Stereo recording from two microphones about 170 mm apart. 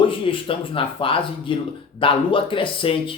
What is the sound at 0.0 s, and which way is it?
Speech, 30° left (ahead or behind).